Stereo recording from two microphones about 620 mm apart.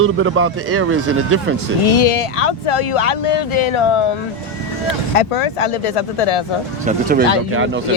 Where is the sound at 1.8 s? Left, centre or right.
Left.